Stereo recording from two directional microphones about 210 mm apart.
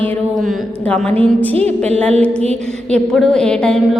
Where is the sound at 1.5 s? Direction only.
30° right (ahead or behind).